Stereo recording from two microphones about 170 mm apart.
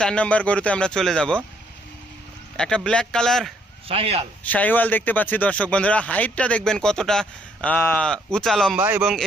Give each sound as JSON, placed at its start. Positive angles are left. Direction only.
{"t": 0.0, "sound": "speech", "side_deg": 5}
{"t": 2.6, "sound": "speech", "side_deg": 5}
{"t": 3.8, "sound": "speech", "side_deg": -35}
{"t": 4.4, "sound": "speech", "side_deg": 10}
{"t": 8.7, "sound": "speech", "side_deg": -10}